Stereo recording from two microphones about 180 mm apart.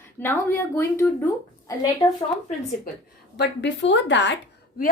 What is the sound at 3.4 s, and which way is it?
Speech, 85° left.